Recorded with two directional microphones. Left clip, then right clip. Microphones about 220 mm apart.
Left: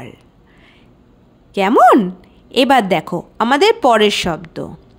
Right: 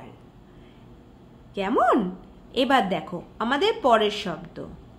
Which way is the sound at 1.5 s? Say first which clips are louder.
Left 12 dB; 50° left (ahead or behind).